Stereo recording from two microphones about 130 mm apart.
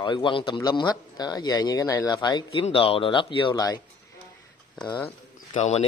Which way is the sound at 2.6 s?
45° left (ahead or behind).